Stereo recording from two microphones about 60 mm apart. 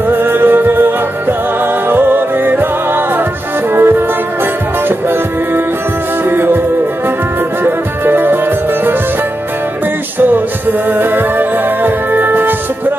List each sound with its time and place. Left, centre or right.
0.1 s music: right
3.7 s music: right
6.2 s music: right
7.6 s music: right
10.1 s music: right